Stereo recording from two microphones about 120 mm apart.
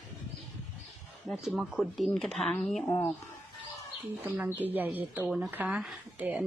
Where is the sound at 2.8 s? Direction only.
30° left (ahead or behind).